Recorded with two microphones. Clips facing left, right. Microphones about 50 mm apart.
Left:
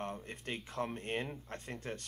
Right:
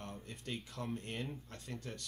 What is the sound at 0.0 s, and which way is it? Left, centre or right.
Speech, left.